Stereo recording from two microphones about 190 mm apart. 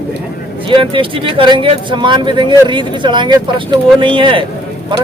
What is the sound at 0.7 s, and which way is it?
Speech, 25° right (ahead or behind).